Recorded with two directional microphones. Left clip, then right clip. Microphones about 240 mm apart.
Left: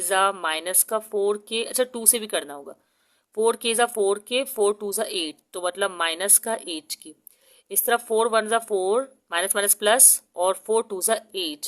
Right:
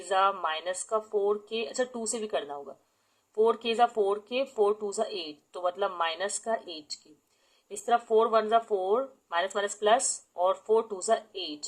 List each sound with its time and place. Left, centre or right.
0.1 s speech: left
7.9 s speech: left